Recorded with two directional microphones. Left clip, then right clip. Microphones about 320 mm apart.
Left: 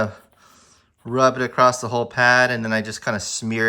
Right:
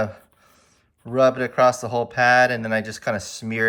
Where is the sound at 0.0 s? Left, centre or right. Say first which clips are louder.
Left 1 dB; centre.